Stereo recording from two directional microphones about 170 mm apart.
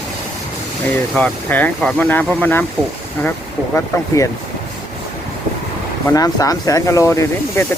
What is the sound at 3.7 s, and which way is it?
Speech, 20° left (ahead or behind).